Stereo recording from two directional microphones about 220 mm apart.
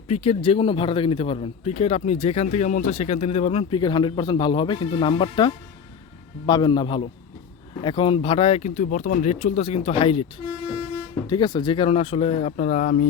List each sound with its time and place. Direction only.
0.1 s speech: 25° left (ahead or behind)
11.3 s speech: 20° left (ahead or behind)